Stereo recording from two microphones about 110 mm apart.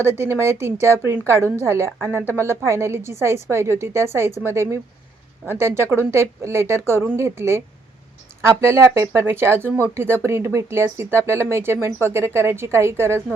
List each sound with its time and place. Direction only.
0.0 s a woman's voice: 25° right (ahead or behind)